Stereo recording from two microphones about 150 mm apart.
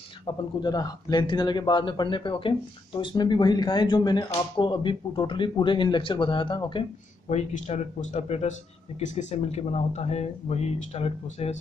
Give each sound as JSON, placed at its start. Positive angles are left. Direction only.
{"t": 0.6, "sound": "a man's voice", "side_deg": 25}
{"t": 7.2, "sound": "speech", "side_deg": 50}